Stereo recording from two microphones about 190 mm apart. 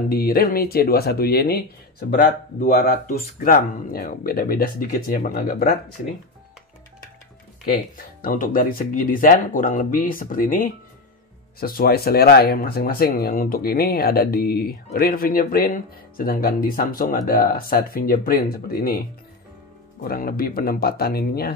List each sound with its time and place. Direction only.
0.1 s speech: 50° left (ahead or behind)
8.2 s speech: 50° left (ahead or behind)